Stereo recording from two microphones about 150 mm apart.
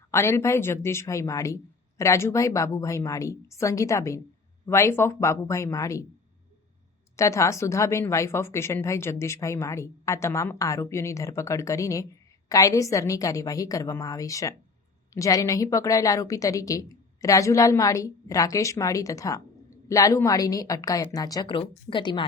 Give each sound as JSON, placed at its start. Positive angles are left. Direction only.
{"t": 0.1, "sound": "a woman's voice", "side_deg": 15}
{"t": 7.2, "sound": "a woman's voice", "side_deg": 20}